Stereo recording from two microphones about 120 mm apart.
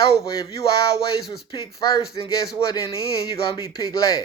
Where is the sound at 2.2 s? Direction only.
35° left (ahead or behind).